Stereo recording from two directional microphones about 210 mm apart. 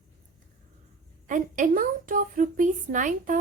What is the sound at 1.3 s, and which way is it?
A woman's voice, 40° right (ahead or behind).